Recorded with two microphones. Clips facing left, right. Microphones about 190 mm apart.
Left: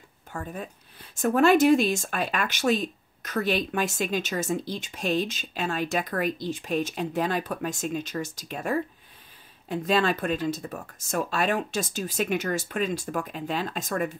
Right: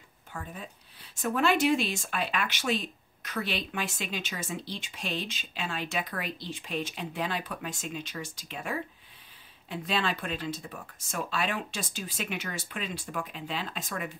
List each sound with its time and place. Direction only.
0.3 s speech: 45° left (ahead or behind)